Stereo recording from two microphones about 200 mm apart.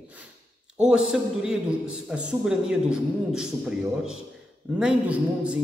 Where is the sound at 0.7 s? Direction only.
5° right (ahead or behind).